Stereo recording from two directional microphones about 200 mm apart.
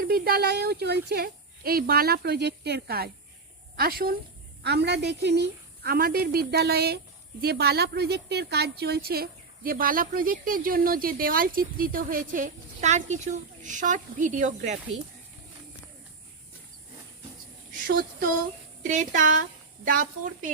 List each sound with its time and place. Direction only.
0.0 s a woman's voice: 50° right (ahead or behind)
17.8 s a woman's voice: 45° right (ahead or behind)